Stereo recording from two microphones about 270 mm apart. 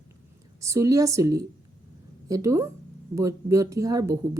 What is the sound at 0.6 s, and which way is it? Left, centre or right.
Speech, centre.